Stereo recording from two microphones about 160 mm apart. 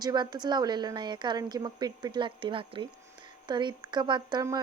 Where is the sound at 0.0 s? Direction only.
25° right (ahead or behind).